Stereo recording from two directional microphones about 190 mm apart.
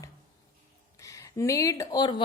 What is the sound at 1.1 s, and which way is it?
Speech, 15° left (ahead or behind).